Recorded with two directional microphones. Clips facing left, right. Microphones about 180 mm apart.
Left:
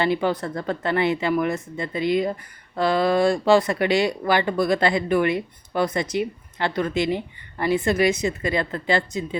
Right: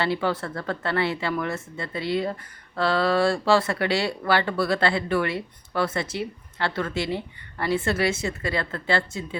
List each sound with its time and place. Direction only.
0.0 s speech: 15° left (ahead or behind)